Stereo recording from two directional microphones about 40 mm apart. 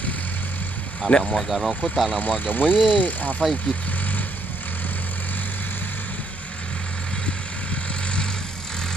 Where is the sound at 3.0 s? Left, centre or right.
Left.